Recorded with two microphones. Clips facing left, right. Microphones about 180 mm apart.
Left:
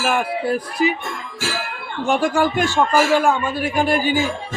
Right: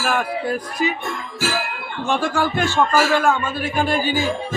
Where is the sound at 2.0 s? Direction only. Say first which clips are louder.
Left 3 dB; 15° left (ahead or behind).